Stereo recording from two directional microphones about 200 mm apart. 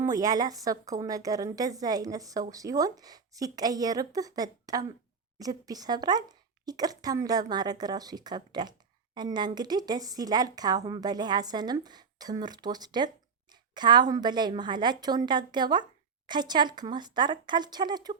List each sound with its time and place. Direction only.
0.0 s a woman's voice: 15° right (ahead or behind)